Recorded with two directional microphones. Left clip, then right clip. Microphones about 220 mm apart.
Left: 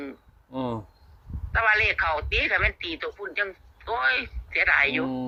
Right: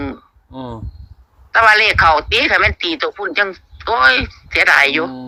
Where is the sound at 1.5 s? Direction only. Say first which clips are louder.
Right 11 dB; 55° right (ahead or behind).